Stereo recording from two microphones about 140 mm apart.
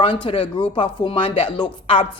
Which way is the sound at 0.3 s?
40° left (ahead or behind).